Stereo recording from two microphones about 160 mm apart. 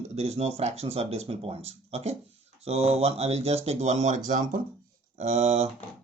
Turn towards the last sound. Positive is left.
turn(degrees=-40)  # may be behind; listen again after turning